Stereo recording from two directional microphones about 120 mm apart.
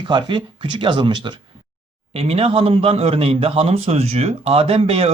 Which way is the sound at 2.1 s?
55° right (ahead or behind).